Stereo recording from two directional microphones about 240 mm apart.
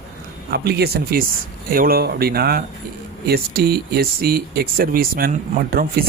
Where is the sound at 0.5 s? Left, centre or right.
Right.